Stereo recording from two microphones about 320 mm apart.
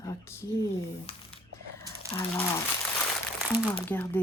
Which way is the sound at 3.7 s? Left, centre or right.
Centre.